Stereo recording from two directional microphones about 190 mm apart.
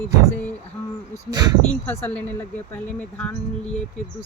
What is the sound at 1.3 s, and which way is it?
Speech, 20° right (ahead or behind).